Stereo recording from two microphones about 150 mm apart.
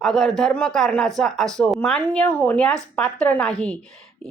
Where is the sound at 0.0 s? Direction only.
Centre (ahead or behind).